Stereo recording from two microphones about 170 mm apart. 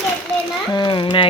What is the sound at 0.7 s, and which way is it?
Speech, 25° left (ahead or behind).